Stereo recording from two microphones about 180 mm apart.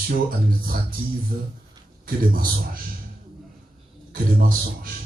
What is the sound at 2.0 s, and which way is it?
Speech, 50° right (ahead or behind).